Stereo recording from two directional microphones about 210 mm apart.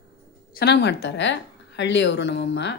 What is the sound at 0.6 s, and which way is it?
Speech, 50° left (ahead or behind).